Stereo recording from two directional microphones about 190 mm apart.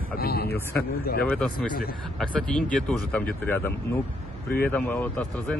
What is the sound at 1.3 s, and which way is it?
Speech, 5° left (ahead or behind).